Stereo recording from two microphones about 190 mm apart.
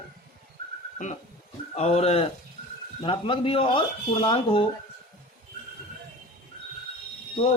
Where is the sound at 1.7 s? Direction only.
35° left (ahead or behind).